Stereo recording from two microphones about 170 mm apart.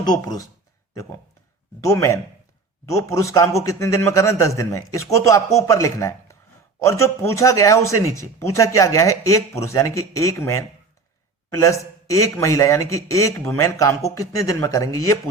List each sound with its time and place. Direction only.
0.0 s speech: 25° left (ahead or behind)
1.8 s speech: 20° left (ahead or behind)